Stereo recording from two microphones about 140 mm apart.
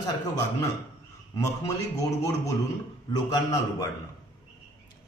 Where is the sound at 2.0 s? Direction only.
25° left (ahead or behind).